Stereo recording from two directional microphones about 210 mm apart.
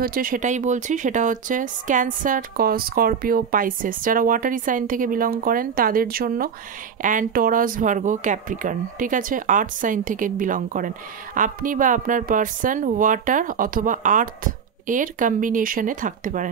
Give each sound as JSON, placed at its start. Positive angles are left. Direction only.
{"t": 0.0, "sound": "speech", "side_deg": -40}